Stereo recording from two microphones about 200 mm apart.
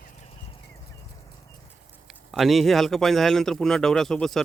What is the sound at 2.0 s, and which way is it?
A man's voice, centre (ahead or behind).